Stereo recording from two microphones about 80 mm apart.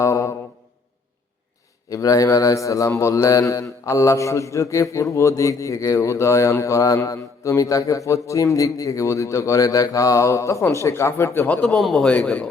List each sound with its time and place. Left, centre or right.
0.0 s mantra: left
1.9 s speech: left
11.6 s a man's voice: centre
12.0 s speech: centre